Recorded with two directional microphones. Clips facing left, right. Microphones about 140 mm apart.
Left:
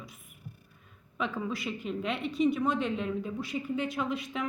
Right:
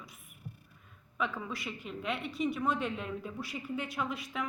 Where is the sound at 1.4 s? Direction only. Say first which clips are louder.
Left 6 dB; 25° left (ahead or behind).